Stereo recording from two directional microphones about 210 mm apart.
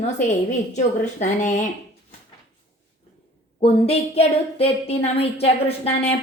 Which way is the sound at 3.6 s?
30° left (ahead or behind).